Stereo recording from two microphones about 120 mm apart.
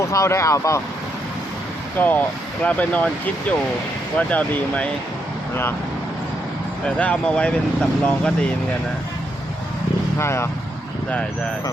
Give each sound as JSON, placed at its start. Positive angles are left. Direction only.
{"t": 0.0, "sound": "speech", "side_deg": 25}
{"t": 2.0, "sound": "speech", "side_deg": 15}
{"t": 6.8, "sound": "speech", "side_deg": 10}
{"t": 10.2, "sound": "speech", "side_deg": 20}